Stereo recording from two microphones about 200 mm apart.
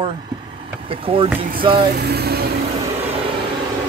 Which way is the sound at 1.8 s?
55° right (ahead or behind).